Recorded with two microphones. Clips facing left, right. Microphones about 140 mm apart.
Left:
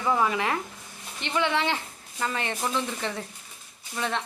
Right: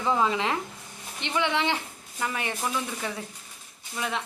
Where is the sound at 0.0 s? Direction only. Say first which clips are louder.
Even; 20° right (ahead or behind).